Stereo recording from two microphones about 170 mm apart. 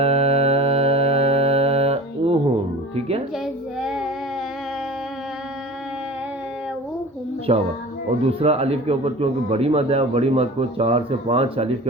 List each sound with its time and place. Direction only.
0.0 s music: 35° right (ahead or behind)
3.4 s child singing: centre (ahead or behind)
7.5 s a man's voice: 35° right (ahead or behind)